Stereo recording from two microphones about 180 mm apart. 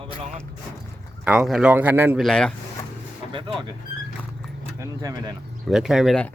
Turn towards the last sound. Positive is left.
turn(degrees=0)  # may be behind; listen again after turning